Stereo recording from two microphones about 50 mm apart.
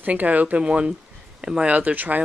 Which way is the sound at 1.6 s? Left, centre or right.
Right.